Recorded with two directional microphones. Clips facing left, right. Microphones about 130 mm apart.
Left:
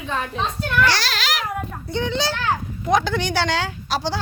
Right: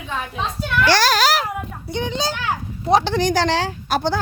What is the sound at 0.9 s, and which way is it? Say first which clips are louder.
Speech: right 8 dB; 40° right (ahead or behind).